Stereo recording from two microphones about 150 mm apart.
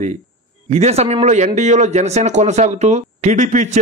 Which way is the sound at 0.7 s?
45° right (ahead or behind).